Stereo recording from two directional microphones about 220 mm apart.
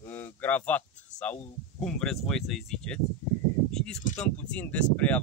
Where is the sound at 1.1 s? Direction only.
30° left (ahead or behind).